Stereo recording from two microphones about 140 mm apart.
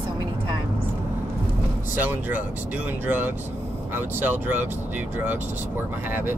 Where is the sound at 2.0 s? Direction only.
15° right (ahead or behind).